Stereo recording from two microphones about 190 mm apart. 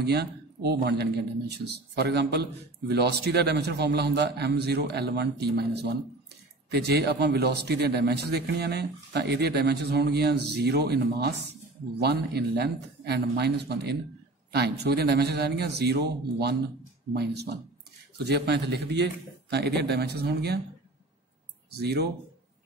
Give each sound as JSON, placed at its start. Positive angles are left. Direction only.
{"t": 0.0, "sound": "a man's voice", "side_deg": -60}
{"t": 21.7, "sound": "a man's voice", "side_deg": -60}